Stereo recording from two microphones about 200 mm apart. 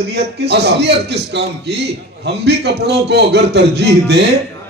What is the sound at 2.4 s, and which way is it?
A man's voice, 55° right (ahead or behind).